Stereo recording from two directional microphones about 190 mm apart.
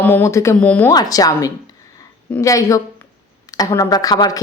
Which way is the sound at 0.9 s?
20° left (ahead or behind).